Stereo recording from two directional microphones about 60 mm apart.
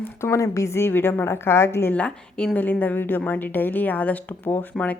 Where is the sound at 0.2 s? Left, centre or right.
Left.